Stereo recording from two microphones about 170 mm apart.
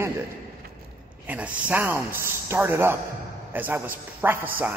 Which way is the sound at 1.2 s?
10° right (ahead or behind).